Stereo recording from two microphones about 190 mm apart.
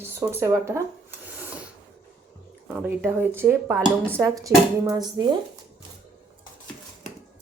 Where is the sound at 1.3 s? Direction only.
10° right (ahead or behind).